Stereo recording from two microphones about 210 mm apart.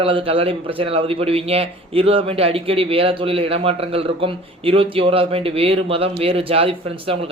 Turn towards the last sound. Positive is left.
turn(degrees=-25)  # may be behind; listen again after turning